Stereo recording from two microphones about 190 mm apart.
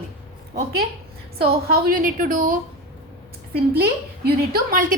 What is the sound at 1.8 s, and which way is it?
Speech, 45° right (ahead or behind).